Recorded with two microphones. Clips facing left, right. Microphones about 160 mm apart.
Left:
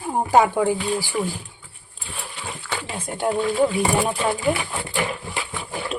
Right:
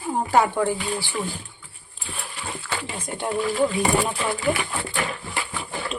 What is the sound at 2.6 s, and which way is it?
Speech, centre (ahead or behind).